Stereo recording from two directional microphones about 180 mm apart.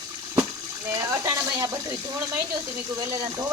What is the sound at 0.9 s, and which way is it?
Speech, 15° right (ahead or behind).